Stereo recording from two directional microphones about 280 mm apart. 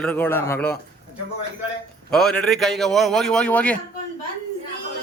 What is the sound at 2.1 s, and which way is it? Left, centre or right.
A man's voice, centre.